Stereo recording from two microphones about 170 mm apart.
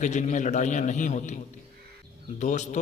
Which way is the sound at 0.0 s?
45° left (ahead or behind).